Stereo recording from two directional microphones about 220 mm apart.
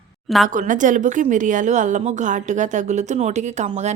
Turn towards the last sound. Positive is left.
turn(degrees=-30)  # may be behind; listen again after turning